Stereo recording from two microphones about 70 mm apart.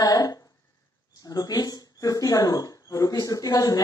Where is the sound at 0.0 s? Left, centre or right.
Left.